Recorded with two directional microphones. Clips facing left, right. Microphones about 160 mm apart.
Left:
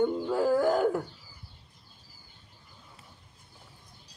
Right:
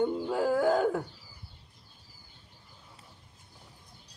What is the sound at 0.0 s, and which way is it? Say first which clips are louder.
Music: left 2 dB; 15° right (ahead or behind).